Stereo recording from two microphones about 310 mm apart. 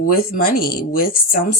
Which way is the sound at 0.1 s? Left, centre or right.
Left.